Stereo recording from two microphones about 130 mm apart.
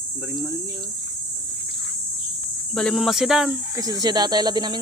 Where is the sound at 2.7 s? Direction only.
Centre (ahead or behind).